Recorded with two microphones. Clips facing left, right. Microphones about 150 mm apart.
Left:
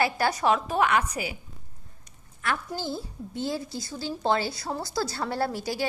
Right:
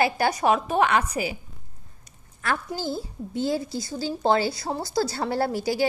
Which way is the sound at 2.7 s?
5° right (ahead or behind).